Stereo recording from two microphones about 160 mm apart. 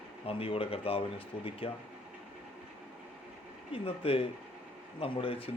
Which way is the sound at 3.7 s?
35° left (ahead or behind).